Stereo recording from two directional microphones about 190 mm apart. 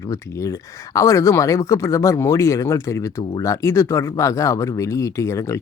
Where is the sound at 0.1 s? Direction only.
15° left (ahead or behind).